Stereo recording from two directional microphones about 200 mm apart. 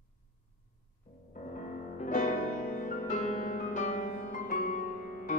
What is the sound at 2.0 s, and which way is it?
Music, 40° left (ahead or behind).